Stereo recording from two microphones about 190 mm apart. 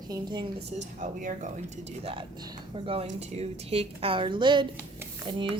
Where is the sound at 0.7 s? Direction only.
40° right (ahead or behind).